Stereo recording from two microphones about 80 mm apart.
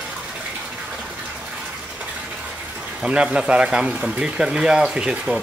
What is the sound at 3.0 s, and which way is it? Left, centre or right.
Speech, centre.